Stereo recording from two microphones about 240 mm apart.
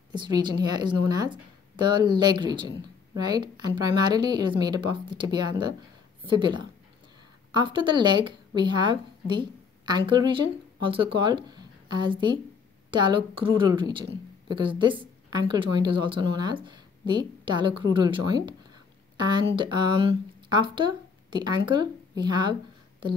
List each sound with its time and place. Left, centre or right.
0.1 s a woman's voice: centre